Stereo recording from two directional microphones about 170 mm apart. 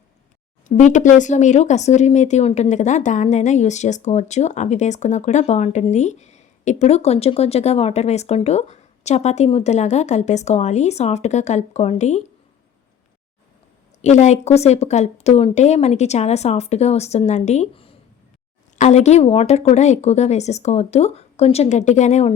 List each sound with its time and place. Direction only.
0.7 s speech: 45° left (ahead or behind)
14.0 s a woman's voice: 40° left (ahead or behind)